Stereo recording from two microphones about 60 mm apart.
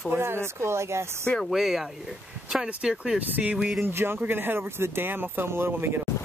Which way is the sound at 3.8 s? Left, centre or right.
Right.